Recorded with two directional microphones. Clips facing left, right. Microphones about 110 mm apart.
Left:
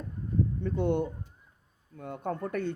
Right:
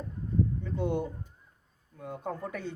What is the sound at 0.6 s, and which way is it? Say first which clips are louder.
Speech: left 3 dB; 60° left (ahead or behind).